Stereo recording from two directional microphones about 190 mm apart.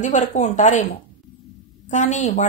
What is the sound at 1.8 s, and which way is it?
Speech, 40° left (ahead or behind).